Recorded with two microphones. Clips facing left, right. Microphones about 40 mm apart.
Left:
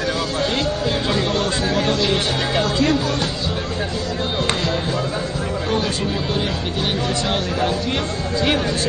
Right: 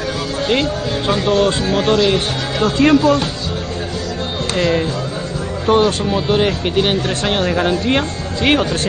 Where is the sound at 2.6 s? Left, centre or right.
Right.